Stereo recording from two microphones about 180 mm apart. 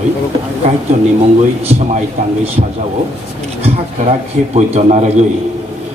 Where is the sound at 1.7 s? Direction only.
35° right (ahead or behind).